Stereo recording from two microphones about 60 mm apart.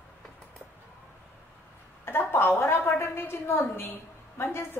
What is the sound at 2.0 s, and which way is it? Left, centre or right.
A woman's voice, left.